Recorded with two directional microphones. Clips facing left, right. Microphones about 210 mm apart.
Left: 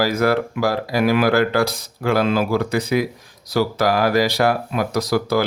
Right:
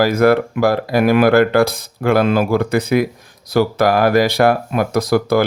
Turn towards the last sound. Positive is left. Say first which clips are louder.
# right 4 dB
turn(degrees=-55)  # may be behind; listen again after turning